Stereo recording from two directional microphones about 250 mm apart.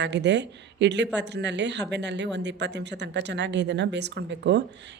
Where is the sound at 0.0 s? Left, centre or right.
Right.